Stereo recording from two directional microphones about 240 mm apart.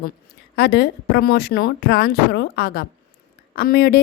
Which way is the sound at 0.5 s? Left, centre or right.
Left.